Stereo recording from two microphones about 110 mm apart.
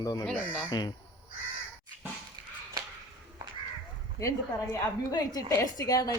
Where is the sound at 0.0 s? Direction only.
35° left (ahead or behind).